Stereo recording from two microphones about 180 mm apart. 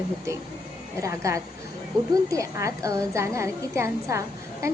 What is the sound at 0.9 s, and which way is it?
A woman's voice, 15° right (ahead or behind).